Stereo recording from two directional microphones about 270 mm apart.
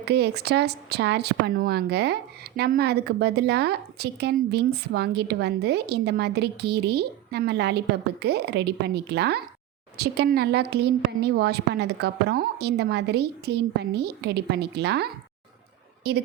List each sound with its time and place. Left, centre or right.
0.0 s speech: right